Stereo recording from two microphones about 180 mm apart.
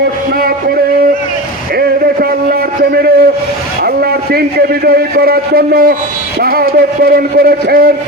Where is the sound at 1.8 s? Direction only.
60° right (ahead or behind).